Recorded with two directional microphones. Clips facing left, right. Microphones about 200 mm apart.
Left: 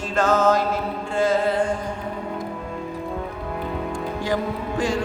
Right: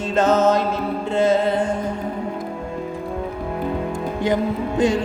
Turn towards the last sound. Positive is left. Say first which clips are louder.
# right 5 dB
turn(degrees=-20)  # may be behind; listen again after turning